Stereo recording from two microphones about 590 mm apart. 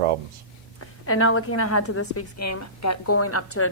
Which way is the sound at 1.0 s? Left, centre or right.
Left.